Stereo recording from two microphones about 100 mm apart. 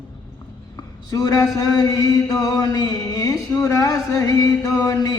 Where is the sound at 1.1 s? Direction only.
40° left (ahead or behind).